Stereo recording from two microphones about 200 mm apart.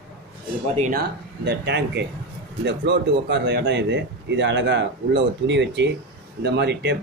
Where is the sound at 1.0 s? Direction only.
55° right (ahead or behind).